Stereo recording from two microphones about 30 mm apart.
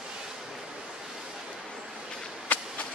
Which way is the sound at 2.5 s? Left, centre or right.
Left.